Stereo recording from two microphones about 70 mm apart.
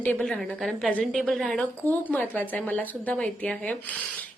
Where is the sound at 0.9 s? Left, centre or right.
Centre.